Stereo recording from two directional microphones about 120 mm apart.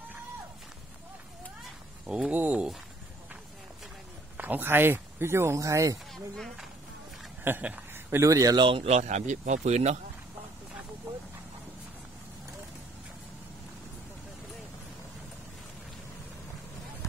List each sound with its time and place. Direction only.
2.0 s speech: 5° right (ahead or behind)
4.4 s speech: 15° right (ahead or behind)
6.3 s speech: centre (ahead or behind)
7.4 s a man's voice: 15° right (ahead or behind)
8.5 s speech: 45° right (ahead or behind)
8.8 s speech: 70° right (ahead or behind)